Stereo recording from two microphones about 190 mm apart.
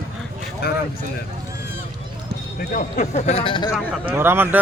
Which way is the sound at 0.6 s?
55° left (ahead or behind).